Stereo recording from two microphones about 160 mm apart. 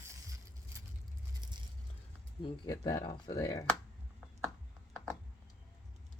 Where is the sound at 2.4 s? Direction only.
30° left (ahead or behind).